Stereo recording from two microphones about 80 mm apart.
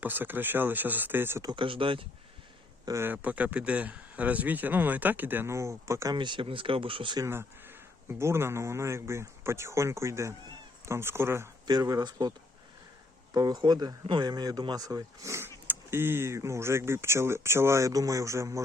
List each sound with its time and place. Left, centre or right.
0.0 s speech: right
1.5 s speech: right
2.9 s speech: right
5.5 s speech: right
6.1 s speech: right
8.2 s speech: right
11.6 s a man's voice: right
13.3 s a man's voice: right
15.6 s speech: right